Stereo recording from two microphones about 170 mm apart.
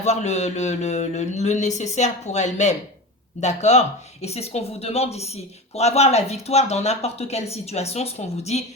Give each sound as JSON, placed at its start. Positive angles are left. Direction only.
{"t": 0.0, "sound": "speech", "side_deg": 40}